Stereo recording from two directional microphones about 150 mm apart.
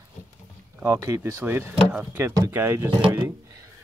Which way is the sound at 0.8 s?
20° right (ahead or behind).